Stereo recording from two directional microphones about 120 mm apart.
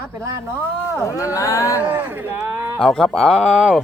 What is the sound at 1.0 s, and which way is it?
Speech, 25° left (ahead or behind).